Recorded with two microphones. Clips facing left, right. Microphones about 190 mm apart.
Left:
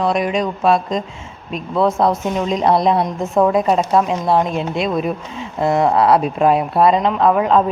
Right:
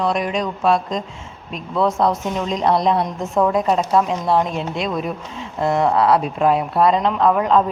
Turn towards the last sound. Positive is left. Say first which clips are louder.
# left 2 dB
turn(degrees=5)  # may be behind; listen again after turning